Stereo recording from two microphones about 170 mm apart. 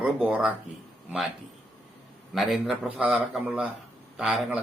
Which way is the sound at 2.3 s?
5° right (ahead or behind).